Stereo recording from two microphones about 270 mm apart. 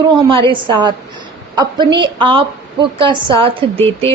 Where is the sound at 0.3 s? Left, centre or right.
Centre.